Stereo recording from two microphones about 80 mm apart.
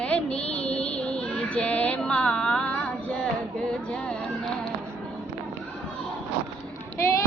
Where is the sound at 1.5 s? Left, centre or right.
Centre.